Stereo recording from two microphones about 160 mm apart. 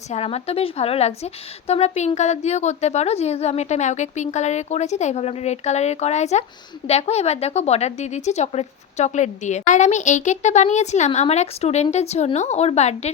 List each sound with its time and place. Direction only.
0.1 s a woman's voice: 40° left (ahead or behind)